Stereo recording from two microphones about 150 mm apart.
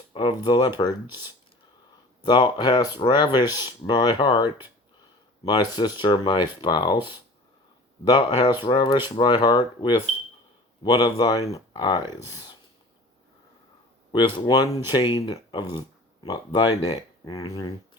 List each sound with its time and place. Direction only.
0.1 s speech: 30° left (ahead or behind)
2.2 s speech: 30° left (ahead or behind)
14.1 s speech: 30° left (ahead or behind)